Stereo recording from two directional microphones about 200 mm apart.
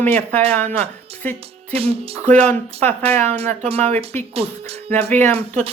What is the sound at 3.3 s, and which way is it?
Speech, 30° right (ahead or behind).